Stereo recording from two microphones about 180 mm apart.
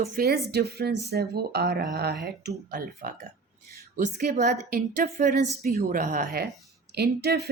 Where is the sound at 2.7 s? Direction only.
55° right (ahead or behind).